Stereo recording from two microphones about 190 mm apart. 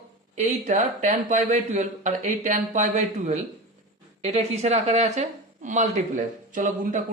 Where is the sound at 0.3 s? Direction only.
40° right (ahead or behind).